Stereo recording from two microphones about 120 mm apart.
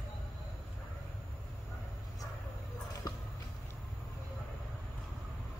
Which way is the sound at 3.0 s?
30° left (ahead or behind).